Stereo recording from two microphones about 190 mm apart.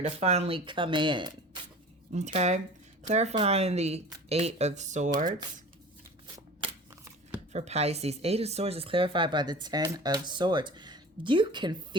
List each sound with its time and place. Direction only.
0.0 s speech: 35° right (ahead or behind)
2.1 s speech: 35° right (ahead or behind)
7.5 s speech: 35° right (ahead or behind)